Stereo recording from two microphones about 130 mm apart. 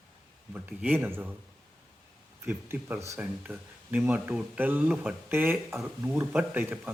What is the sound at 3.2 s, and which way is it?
Speech, 10° right (ahead or behind).